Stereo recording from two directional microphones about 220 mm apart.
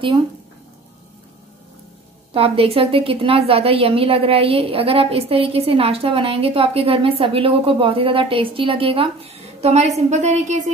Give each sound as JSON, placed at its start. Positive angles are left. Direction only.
{"t": 2.3, "sound": "a woman's voice", "side_deg": -25}